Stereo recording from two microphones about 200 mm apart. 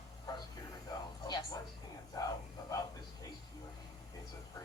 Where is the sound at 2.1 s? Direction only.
15° left (ahead or behind).